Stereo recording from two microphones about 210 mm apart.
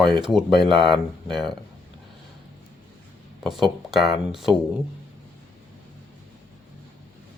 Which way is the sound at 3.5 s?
20° right (ahead or behind).